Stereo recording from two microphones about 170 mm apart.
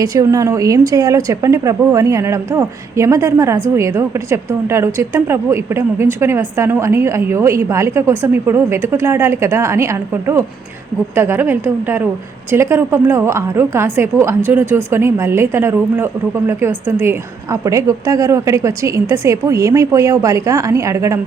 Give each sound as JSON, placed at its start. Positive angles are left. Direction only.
{"t": 0.0, "sound": "a woman's voice", "side_deg": -20}